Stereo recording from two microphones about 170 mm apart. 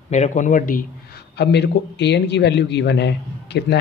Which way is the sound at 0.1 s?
45° left (ahead or behind).